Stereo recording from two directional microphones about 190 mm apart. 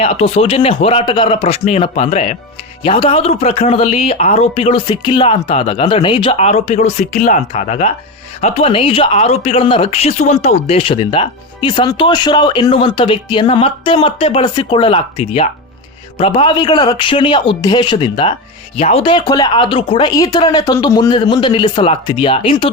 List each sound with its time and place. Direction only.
0.0 s speech: 35° left (ahead or behind)